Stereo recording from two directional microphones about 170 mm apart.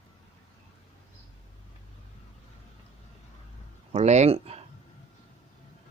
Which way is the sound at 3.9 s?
40° right (ahead or behind).